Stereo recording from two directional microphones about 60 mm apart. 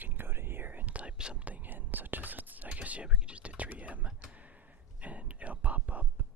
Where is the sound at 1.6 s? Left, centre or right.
Right.